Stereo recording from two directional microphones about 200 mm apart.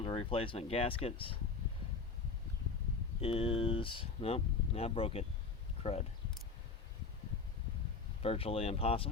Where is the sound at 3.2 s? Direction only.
30° left (ahead or behind).